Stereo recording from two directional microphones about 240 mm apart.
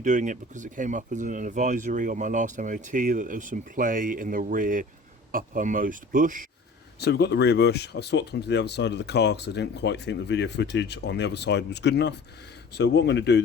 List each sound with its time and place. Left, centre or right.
0.0 s speech: right
7.0 s speech: left